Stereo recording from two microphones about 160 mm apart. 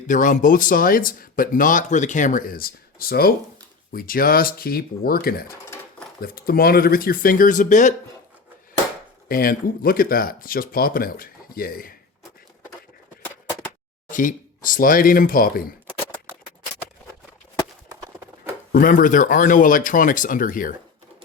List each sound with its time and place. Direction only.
0.1 s speech: 55° left (ahead or behind)
9.3 s speech: 65° left (ahead or behind)
14.1 s speech: 55° left (ahead or behind)
18.7 s speech: 60° left (ahead or behind)